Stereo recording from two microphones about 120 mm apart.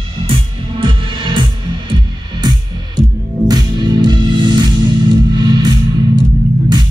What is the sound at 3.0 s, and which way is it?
Music, 35° right (ahead or behind).